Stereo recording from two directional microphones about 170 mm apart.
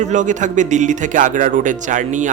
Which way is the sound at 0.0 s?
45° right (ahead or behind).